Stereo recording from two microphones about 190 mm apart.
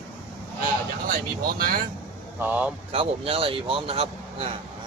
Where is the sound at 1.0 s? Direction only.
45° right (ahead or behind).